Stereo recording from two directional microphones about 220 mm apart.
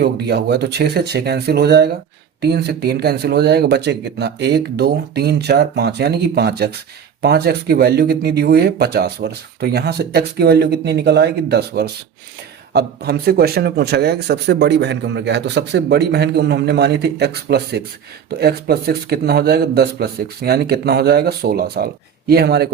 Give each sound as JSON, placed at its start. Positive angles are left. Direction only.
{"t": 0.0, "sound": "a man's voice", "side_deg": -45}